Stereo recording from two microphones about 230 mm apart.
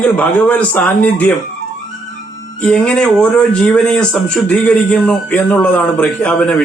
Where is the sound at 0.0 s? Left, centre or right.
Centre.